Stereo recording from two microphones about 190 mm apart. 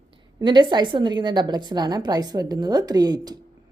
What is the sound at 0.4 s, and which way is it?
A woman's voice, 25° right (ahead or behind).